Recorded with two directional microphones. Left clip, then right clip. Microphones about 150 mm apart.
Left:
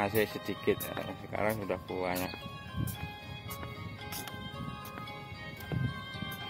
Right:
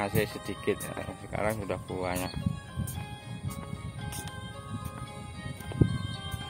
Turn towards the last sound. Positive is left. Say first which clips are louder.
# right 1 dB
turn(degrees=30)  # may be behind; listen again after turning